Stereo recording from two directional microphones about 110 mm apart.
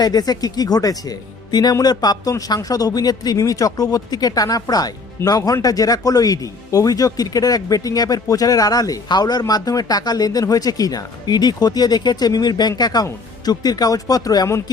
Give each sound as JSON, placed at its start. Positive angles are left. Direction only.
{"t": 0.0, "sound": "speech", "side_deg": 35}